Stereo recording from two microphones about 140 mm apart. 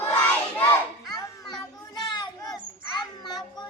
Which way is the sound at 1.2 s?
30° left (ahead or behind).